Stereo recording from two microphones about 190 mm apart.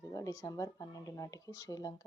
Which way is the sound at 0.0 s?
15° left (ahead or behind).